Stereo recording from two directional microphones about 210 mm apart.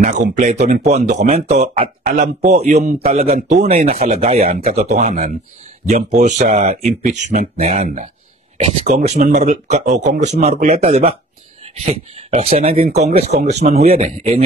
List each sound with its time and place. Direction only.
0.0 s speech: 35° right (ahead or behind)